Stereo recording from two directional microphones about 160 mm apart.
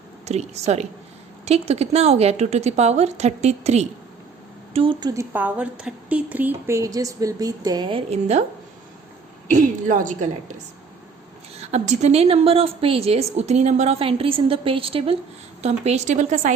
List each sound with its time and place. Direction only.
0.3 s a woman's voice: 45° right (ahead or behind)
4.7 s a woman's voice: 35° right (ahead or behind)
5.3 s a woman's voice: 10° right (ahead or behind); by 8.4 s 45° right (ahead or behind)
9.5 s a woman's voice: 50° right (ahead or behind)